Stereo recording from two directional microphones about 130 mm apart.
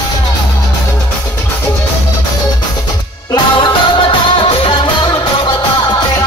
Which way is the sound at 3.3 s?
40° left (ahead or behind).